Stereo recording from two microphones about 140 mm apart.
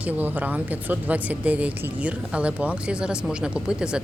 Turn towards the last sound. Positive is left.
turn(degrees=-5)  # may be behind; listen again after turning